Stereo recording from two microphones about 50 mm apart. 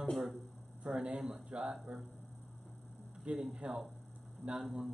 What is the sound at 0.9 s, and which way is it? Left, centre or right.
Speech, centre.